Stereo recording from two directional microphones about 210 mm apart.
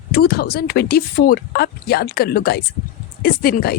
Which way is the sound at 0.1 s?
45° left (ahead or behind).